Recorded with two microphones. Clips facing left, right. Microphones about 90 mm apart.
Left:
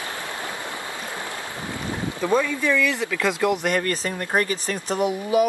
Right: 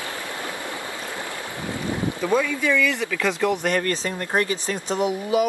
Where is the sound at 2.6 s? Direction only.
Centre (ahead or behind).